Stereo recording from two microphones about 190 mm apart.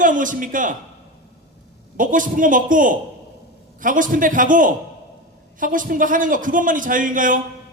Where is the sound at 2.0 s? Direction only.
45° right (ahead or behind).